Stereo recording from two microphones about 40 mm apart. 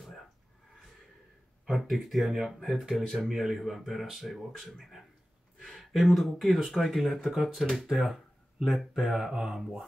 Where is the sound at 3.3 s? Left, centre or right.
Centre.